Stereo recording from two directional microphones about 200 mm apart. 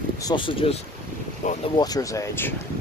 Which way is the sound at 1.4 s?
40° left (ahead or behind).